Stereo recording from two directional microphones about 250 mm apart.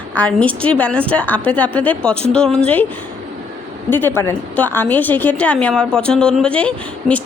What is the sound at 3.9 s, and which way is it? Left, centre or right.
A woman's voice, centre.